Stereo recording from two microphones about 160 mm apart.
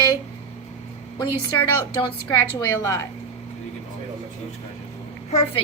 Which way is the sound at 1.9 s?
25° left (ahead or behind).